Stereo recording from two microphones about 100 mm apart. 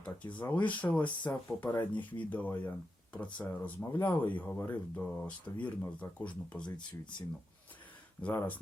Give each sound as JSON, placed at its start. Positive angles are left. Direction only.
{"t": 0.0, "sound": "speech", "side_deg": 15}
{"t": 7.0, "sound": "speech", "side_deg": 50}
{"t": 8.2, "sound": "speech", "side_deg": 15}